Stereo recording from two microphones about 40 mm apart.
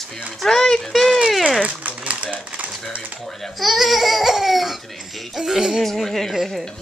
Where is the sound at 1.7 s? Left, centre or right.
Right.